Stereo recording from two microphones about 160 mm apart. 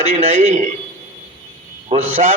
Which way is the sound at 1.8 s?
45° right (ahead or behind).